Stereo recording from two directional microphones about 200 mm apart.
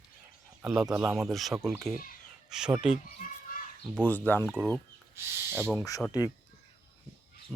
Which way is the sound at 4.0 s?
10° left (ahead or behind).